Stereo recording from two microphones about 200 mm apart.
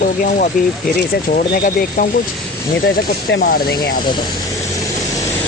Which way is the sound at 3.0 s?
55° left (ahead or behind).